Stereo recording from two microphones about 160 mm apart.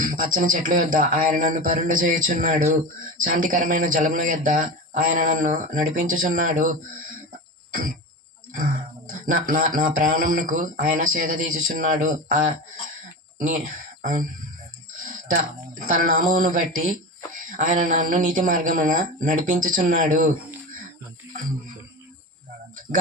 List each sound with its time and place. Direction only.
0.0 s speech: 55° right (ahead or behind)
7.7 s cough: 60° right (ahead or behind)
9.1 s speech: 55° right (ahead or behind)
14.0 s speech: 55° right (ahead or behind)